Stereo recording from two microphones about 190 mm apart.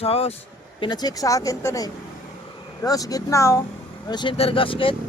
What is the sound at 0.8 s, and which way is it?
Speech, 20° left (ahead or behind).